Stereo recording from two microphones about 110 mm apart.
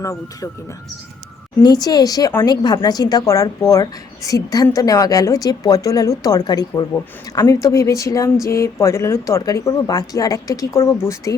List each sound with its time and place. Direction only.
0.0 s speech: 30° left (ahead or behind)
1.6 s speech: 40° left (ahead or behind)